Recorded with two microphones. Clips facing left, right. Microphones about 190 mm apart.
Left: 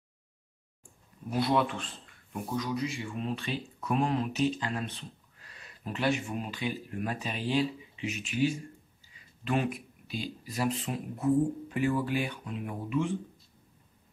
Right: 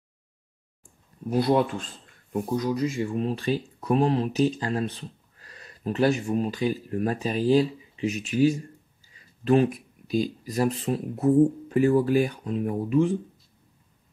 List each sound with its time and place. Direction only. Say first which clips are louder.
1.4 s speech: right 5 dB; 40° right (ahead or behind)